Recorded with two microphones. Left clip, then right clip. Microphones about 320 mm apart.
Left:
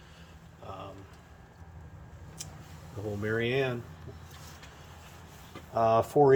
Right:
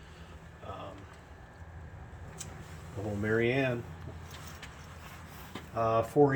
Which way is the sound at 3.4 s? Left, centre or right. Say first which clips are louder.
Left 1 dB; centre.